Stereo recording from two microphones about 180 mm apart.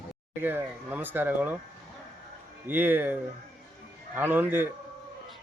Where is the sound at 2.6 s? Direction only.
10° right (ahead or behind).